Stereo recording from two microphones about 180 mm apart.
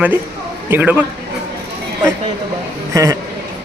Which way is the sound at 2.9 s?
15° right (ahead or behind).